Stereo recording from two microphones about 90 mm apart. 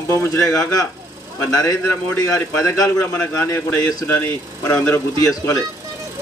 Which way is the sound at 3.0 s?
30° left (ahead or behind).